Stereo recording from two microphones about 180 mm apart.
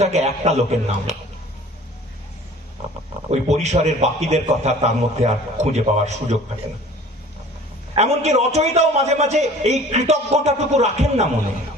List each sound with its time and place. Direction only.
0.0 s a man's voice: 35° right (ahead or behind)
3.3 s a man's voice: 40° right (ahead or behind)
7.9 s a man's voice: 40° right (ahead or behind)